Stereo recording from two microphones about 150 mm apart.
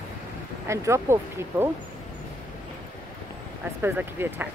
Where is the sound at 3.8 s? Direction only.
10° right (ahead or behind).